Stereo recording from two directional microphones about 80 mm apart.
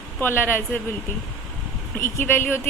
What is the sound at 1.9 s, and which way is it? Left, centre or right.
Speech, left.